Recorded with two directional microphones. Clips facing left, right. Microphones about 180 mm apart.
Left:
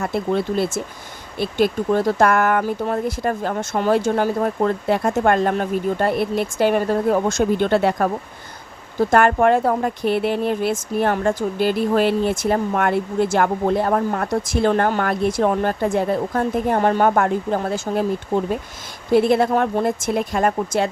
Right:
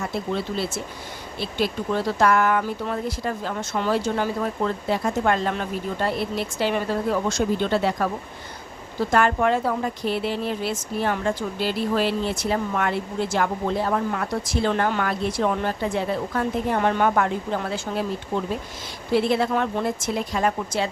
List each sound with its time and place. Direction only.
0.0 s speech: 55° left (ahead or behind)